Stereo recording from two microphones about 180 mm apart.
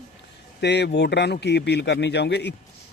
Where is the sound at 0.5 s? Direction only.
70° left (ahead or behind).